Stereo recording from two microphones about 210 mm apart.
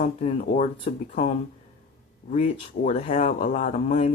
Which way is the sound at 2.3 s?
35° left (ahead or behind).